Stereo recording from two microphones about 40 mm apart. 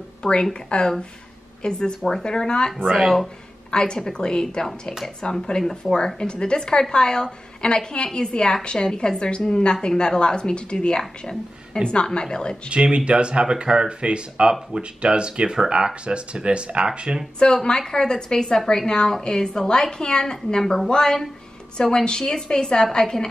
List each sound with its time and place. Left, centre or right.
0.2 s a woman's voice: left
3.0 s speech: centre
3.7 s a woman's voice: left
5.9 s a woman's voice: left
12.7 s speech: right
17.6 s a woman's voice: centre